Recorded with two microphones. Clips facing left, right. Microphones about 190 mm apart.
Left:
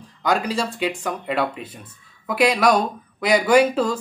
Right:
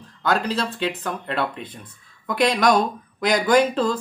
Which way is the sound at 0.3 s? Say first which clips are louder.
Left 1 dB; 10° left (ahead or behind).